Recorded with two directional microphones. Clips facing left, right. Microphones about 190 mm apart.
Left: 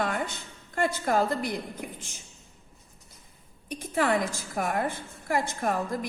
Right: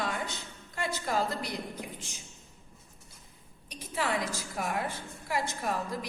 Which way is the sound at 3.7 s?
50° left (ahead or behind).